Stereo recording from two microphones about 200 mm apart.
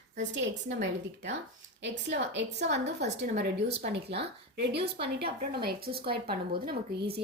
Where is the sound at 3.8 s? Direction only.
40° right (ahead or behind).